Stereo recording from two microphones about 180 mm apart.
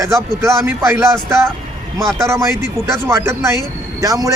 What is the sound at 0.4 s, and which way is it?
Speech, 15° right (ahead or behind).